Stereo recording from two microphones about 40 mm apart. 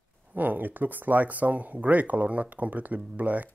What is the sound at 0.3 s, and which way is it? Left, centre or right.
Speech, right.